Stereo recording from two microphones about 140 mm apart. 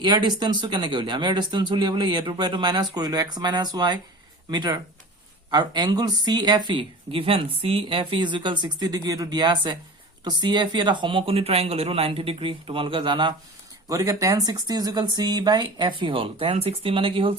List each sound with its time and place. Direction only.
0.0 s speech: 30° right (ahead or behind)
13.8 s speech: 25° right (ahead or behind)